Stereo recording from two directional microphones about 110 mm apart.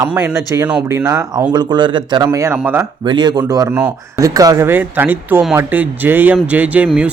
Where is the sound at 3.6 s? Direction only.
10° right (ahead or behind).